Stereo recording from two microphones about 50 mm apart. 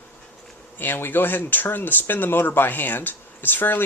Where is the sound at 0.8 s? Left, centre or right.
Left.